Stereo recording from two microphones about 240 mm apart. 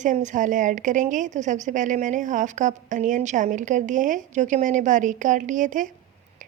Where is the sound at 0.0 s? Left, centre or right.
Right.